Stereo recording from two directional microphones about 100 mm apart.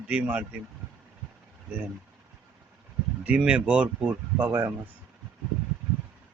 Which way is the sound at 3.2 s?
15° right (ahead or behind).